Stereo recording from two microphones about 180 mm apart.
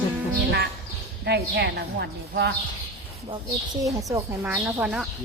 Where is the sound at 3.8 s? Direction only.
15° right (ahead or behind); by 5.0 s centre (ahead or behind).